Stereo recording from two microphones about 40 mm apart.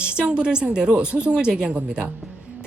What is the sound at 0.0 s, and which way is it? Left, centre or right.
A woman's voice, right.